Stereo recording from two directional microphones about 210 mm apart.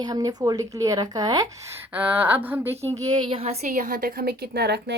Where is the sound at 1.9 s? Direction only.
5° right (ahead or behind).